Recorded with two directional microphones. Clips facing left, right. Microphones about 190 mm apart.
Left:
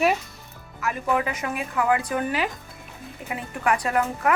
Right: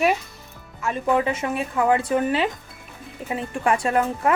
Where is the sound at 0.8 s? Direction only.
25° right (ahead or behind).